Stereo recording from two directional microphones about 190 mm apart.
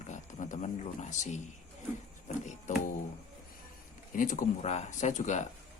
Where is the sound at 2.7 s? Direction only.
40° left (ahead or behind).